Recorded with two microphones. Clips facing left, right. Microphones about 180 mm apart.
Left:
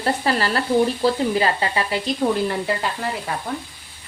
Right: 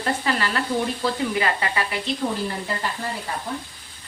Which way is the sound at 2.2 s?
50° left (ahead or behind).